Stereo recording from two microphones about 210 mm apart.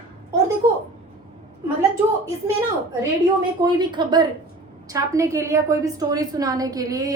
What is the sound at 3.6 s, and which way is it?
A woman's voice, 20° right (ahead or behind).